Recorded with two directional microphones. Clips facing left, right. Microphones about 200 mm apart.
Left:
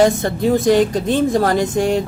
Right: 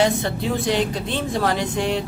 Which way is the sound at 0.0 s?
45° left (ahead or behind).